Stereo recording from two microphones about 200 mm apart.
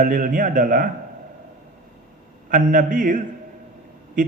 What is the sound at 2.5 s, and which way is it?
Speech, 40° right (ahead or behind).